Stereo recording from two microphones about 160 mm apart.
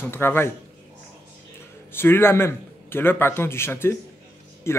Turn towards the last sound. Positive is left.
turn(degrees=15)  # may be behind; listen again after turning